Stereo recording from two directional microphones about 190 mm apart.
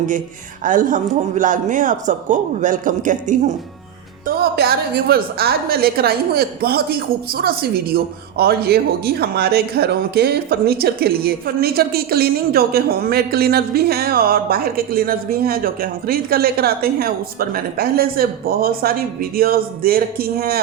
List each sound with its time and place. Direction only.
0.6 s a woman's voice: 45° right (ahead or behind)
4.3 s a woman's voice: 55° right (ahead or behind)